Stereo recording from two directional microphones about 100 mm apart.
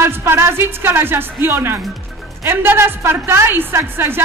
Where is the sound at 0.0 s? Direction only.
25° right (ahead or behind).